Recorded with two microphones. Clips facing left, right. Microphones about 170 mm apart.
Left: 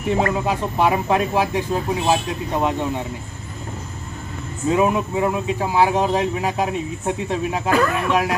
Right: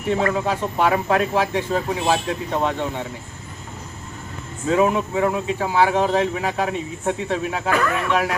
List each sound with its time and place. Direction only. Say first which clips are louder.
0.2 s speech: left 1 dB; 15° left (ahead or behind)
4.7 s speech: even; 15° left (ahead or behind)
7.7 s speech: left 2 dB; 35° left (ahead or behind)
8.1 s speech: even; 15° left (ahead or behind)